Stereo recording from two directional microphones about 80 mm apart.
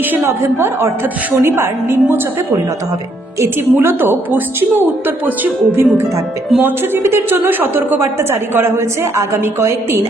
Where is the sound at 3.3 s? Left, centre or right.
Right.